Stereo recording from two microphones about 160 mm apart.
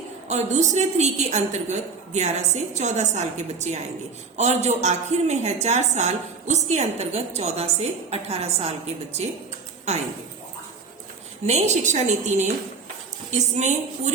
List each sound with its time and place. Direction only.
0.3 s a woman's voice: 45° right (ahead or behind)
11.4 s a woman's voice: 45° right (ahead or behind)